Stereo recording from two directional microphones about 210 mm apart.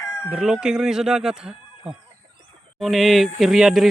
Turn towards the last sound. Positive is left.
turn(degrees=0)  # may be behind; listen again after turning